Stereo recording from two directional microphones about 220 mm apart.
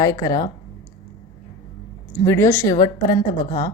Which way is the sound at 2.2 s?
10° left (ahead or behind).